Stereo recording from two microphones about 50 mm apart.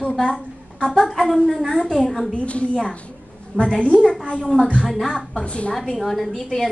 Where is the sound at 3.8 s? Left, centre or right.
Centre.